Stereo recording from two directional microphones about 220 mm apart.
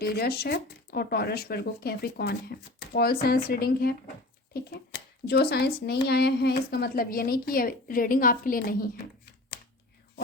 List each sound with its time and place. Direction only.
0.0 s speech: 45° left (ahead or behind)
5.3 s speech: 45° left (ahead or behind)